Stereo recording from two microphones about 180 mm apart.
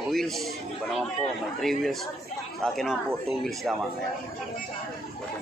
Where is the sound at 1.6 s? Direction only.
Centre (ahead or behind).